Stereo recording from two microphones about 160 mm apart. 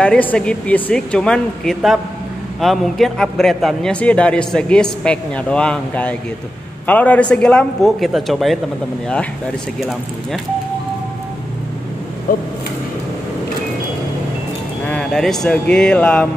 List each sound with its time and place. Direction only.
0.0 s a man's voice: 10° left (ahead or behind)
9.8 s a man's voice: centre (ahead or behind)
12.3 s speech: 60° left (ahead or behind)
14.9 s a man's voice: 5° left (ahead or behind)